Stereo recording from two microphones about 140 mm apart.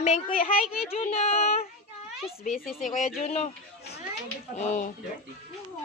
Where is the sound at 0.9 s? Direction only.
45° left (ahead or behind).